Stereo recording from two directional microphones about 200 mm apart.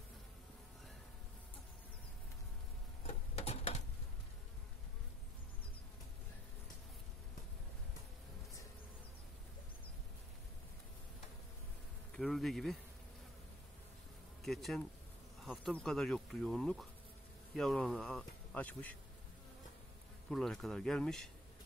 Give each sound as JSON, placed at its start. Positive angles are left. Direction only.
{"t": 3.0, "sound": "a sound", "side_deg": 30}
{"t": 12.1, "sound": "speech", "side_deg": 0}
{"t": 14.4, "sound": "speech", "side_deg": 0}
{"t": 20.2, "sound": "speech", "side_deg": 0}